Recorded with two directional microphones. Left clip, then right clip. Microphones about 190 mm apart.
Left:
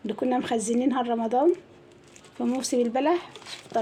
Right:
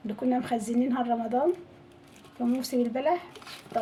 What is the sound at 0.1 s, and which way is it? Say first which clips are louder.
A woman's voice: left 3 dB; 40° left (ahead or behind).